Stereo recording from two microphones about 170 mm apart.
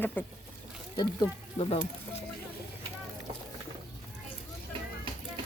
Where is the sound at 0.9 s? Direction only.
25° left (ahead or behind).